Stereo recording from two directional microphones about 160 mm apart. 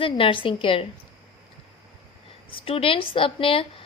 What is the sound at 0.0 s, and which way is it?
Speech, 35° left (ahead or behind).